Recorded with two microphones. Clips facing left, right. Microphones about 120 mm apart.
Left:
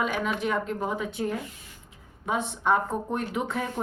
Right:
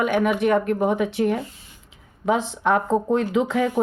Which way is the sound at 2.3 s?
90° right.